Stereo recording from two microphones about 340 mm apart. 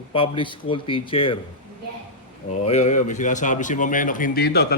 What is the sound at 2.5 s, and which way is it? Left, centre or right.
A man's voice, centre.